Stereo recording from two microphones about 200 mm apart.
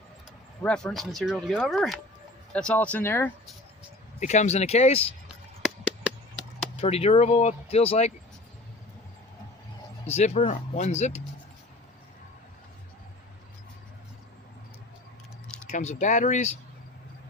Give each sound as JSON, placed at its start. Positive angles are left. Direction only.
{"t": 0.6, "sound": "speech", "side_deg": 5}
{"t": 4.2, "sound": "speech", "side_deg": 35}
{"t": 5.6, "sound": "a sound", "side_deg": -5}
{"t": 6.8, "sound": "speech", "side_deg": 30}
{"t": 10.2, "sound": "speech", "side_deg": 30}
{"t": 15.6, "sound": "speech", "side_deg": 35}